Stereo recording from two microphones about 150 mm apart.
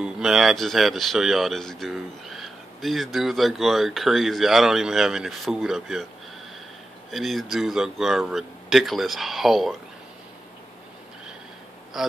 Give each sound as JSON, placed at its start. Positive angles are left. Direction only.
{"t": 0.0, "sound": "speech", "side_deg": 0}
{"t": 7.1, "sound": "speech", "side_deg": 0}
{"t": 11.9, "sound": "speech", "side_deg": 0}